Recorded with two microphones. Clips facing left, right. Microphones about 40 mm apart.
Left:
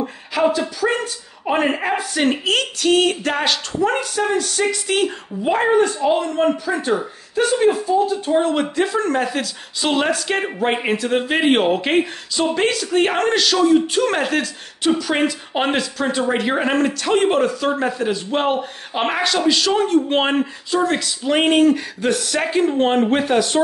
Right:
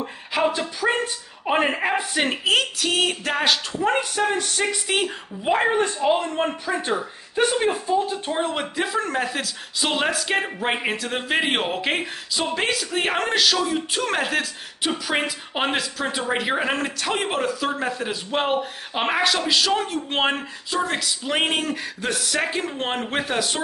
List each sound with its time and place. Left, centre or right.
0.5 s speech: right
1.4 s speech: centre
3.8 s speech: centre
6.1 s speech: right; by 23.6 s centre